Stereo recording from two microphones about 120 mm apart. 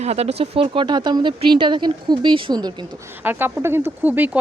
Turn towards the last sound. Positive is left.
turn(degrees=-15)  # may be behind; listen again after turning